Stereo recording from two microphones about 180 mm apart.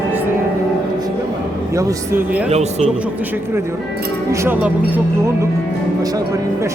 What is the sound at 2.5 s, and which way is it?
Speech, 35° right (ahead or behind).